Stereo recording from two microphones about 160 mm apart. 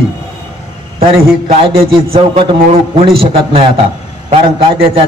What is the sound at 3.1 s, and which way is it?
Speech, 35° right (ahead or behind).